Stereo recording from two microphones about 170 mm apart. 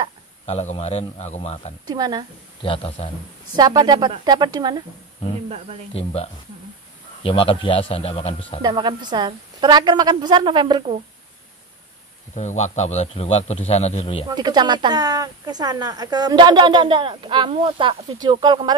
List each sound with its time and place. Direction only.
0.5 s a man's voice: 40° left (ahead or behind)
1.9 s speech: 25° right (ahead or behind)
2.6 s a man's voice: 35° left (ahead or behind)
3.5 s speech: 25° right (ahead or behind)
5.9 s a man's voice: 35° left (ahead or behind)
8.6 s speech: 25° right (ahead or behind)
12.4 s a man's voice: 45° left (ahead or behind)
14.3 s speech: 25° right (ahead or behind)